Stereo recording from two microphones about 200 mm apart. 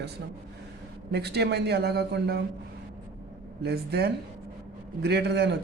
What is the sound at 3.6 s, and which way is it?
Speech, 55° right (ahead or behind).